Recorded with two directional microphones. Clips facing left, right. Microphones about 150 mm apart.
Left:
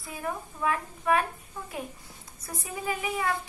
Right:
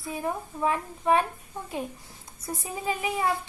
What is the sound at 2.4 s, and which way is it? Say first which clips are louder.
Speech: right 2 dB; 25° right (ahead or behind).